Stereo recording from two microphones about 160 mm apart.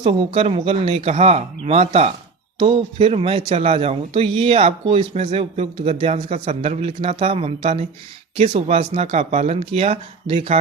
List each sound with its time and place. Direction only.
0.0 s a man's voice: 35° right (ahead or behind)